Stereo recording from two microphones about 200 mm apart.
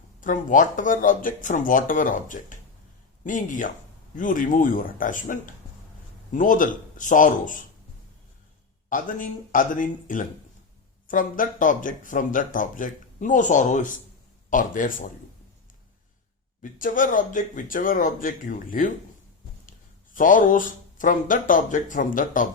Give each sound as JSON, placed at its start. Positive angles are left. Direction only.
{"t": 0.2, "sound": "speech", "side_deg": 40}
{"t": 8.9, "sound": "speech", "side_deg": 40}
{"t": 16.6, "sound": "speech", "side_deg": 40}
{"t": 20.1, "sound": "speech", "side_deg": 40}